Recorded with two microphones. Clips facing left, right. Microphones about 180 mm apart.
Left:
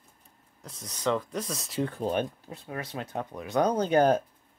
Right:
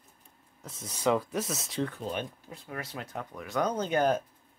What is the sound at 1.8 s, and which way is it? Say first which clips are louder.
Speech: left 6 dB; 40° left (ahead or behind).